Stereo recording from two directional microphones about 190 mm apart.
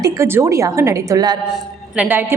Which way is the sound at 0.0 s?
15° right (ahead or behind).